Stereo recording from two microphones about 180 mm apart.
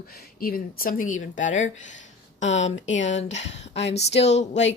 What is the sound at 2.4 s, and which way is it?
Speech, 90° left.